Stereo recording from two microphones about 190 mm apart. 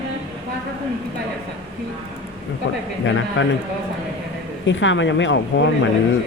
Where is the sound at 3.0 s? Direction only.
75° left (ahead or behind).